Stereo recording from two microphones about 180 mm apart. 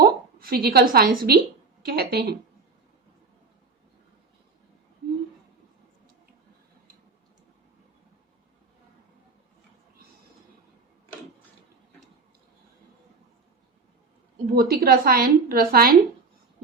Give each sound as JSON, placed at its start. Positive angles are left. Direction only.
{"t": 0.0, "sound": "a woman's voice", "side_deg": -55}
{"t": 14.5, "sound": "a woman's voice", "side_deg": -55}